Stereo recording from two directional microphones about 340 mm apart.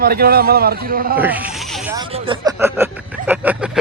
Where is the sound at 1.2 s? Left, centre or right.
Centre.